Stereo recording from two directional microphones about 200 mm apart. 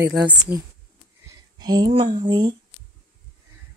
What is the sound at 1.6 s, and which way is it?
Speech, 20° right (ahead or behind).